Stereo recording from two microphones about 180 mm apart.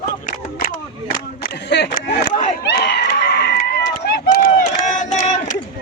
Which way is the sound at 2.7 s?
65° left (ahead or behind).